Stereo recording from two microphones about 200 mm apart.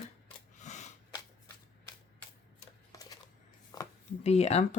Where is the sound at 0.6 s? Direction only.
35° left (ahead or behind).